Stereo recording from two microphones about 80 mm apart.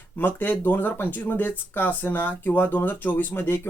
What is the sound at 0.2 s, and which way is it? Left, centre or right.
Speech, left.